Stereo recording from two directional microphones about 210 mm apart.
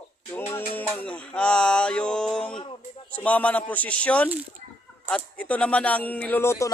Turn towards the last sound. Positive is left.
turn(degrees=15)  # may be behind; listen again after turning